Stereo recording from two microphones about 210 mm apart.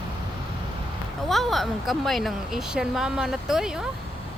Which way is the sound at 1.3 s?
Centre (ahead or behind).